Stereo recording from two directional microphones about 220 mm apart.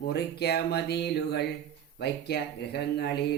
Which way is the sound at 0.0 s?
45° left (ahead or behind).